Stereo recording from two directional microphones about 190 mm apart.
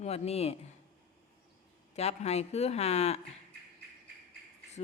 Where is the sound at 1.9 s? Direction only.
35° left (ahead or behind).